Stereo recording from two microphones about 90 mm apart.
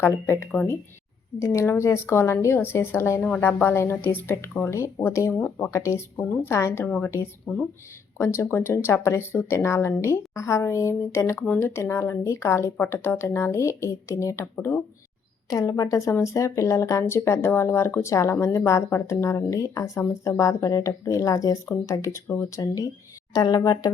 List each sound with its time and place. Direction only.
0.0 s a woman's voice: 25° left (ahead or behind)
5.7 s speech: 35° left (ahead or behind)
6.1 s a woman's voice: 25° left (ahead or behind)
7.5 s speech: centre (ahead or behind)
8.2 s a woman's voice: 30° left (ahead or behind)
11.4 s speech: 15° left (ahead or behind)
11.7 s a woman's voice: 30° left (ahead or behind)
15.4 s speech: 40° left (ahead or behind)